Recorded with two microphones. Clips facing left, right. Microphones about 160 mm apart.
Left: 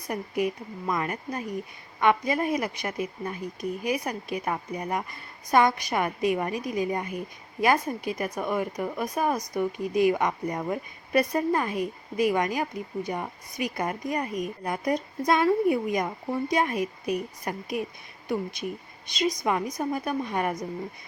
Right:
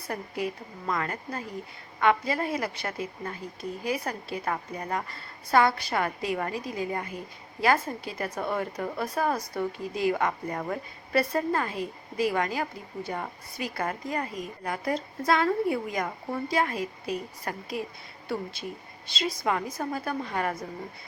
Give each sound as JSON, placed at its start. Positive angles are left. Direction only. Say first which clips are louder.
{"t": 0.1, "sound": "a woman's voice", "louder": "left 4 dB", "side_deg": 15}